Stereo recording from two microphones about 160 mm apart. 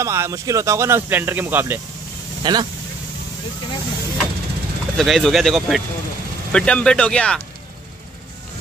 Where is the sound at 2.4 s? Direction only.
25° right (ahead or behind).